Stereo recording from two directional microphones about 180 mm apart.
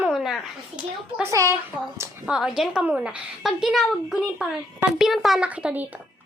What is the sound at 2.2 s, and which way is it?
A woman's voice, 5° right (ahead or behind).